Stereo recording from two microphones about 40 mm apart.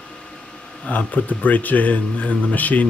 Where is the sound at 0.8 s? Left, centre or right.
Left.